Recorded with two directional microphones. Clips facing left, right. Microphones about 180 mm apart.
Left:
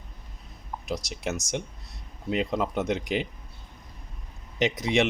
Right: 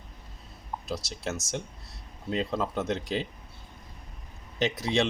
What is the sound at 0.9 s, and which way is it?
Speech, 20° left (ahead or behind).